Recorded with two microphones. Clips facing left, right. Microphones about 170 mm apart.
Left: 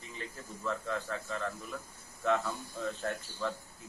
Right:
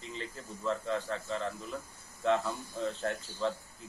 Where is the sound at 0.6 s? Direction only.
20° right (ahead or behind).